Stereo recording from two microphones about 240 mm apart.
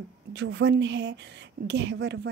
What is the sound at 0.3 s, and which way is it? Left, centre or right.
A woman's voice, right.